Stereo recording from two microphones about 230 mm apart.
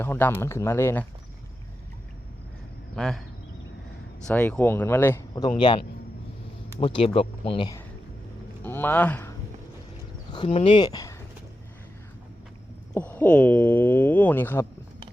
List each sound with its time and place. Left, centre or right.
0.0 s speech: centre
2.9 s speech: centre
4.3 s speech: centre
8.6 s speech: centre
10.3 s speech: left
12.9 s speech: centre